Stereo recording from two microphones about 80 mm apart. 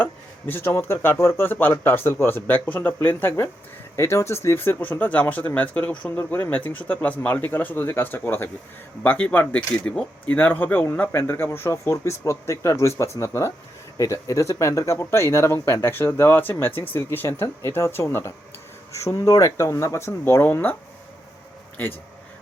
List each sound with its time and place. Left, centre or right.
0.0 s speech: left
3.9 s speech: left; by 6.1 s centre
6.1 s speech: left
18.9 s speech: left